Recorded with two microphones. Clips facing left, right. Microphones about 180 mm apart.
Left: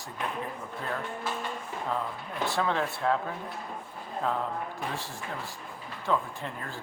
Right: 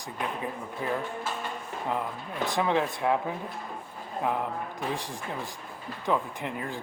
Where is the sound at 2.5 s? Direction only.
15° right (ahead or behind).